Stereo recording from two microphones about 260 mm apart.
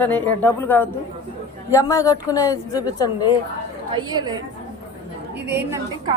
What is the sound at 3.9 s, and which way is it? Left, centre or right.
A woman's voice, centre.